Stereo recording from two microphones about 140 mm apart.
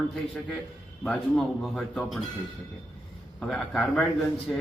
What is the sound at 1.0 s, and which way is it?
Speech, 5° left (ahead or behind).